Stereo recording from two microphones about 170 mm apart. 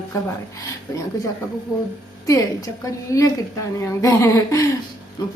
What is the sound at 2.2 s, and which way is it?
Speech, 20° left (ahead or behind).